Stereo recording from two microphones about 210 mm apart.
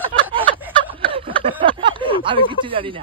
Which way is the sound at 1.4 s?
25° right (ahead or behind).